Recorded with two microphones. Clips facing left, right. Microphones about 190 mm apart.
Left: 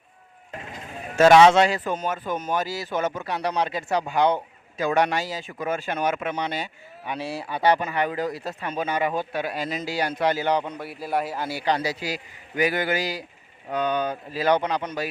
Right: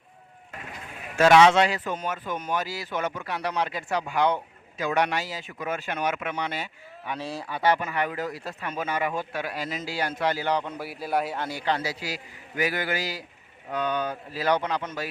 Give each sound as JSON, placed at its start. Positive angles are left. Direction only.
{"t": 1.3, "sound": "speech", "side_deg": 40}
{"t": 3.2, "sound": "speech", "side_deg": 30}
{"t": 4.9, "sound": "speech", "side_deg": 35}
{"t": 6.1, "sound": "speech", "side_deg": 25}
{"t": 7.2, "sound": "a man's voice", "side_deg": 10}
{"t": 7.4, "sound": "speech", "side_deg": 25}
{"t": 10.8, "sound": "a man's voice", "side_deg": 0}